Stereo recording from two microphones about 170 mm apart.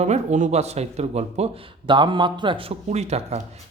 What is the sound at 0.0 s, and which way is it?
Speech, 45° right (ahead or behind).